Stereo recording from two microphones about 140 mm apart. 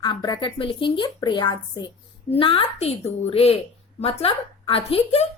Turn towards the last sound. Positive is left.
turn(degrees=45)  # may be behind; listen again after turning